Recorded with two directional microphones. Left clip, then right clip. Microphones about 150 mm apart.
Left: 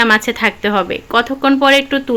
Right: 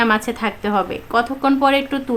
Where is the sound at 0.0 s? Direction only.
20° left (ahead or behind).